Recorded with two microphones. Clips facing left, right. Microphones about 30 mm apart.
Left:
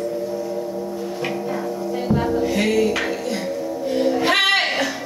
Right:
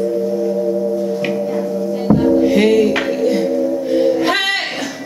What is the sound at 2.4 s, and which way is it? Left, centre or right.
Music, centre.